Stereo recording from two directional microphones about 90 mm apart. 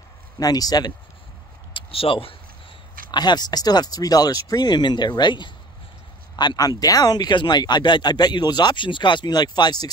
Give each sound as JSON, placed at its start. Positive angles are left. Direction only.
{"t": 0.4, "sound": "speech", "side_deg": 45}
{"t": 1.7, "sound": "a sound", "side_deg": 80}
{"t": 3.1, "sound": "speech", "side_deg": 55}
{"t": 6.3, "sound": "speech", "side_deg": 50}